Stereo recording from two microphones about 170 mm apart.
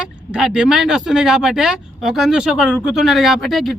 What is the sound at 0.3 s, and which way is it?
Speech, 5° right (ahead or behind).